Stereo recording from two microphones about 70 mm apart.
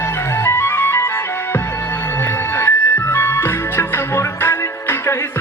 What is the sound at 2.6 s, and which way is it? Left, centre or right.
Music, left.